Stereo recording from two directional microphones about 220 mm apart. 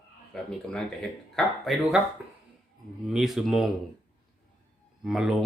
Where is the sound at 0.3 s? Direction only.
Centre (ahead or behind).